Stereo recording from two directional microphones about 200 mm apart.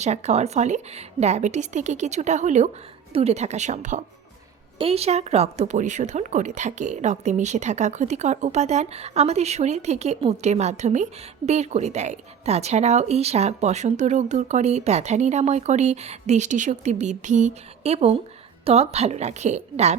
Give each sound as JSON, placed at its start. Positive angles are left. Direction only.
{"t": 0.0, "sound": "speech", "side_deg": -35}